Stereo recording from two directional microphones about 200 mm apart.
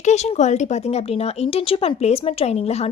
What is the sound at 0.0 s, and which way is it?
Speech, 35° left (ahead or behind).